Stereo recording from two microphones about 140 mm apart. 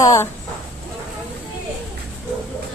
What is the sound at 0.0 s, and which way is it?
Speech, 25° left (ahead or behind).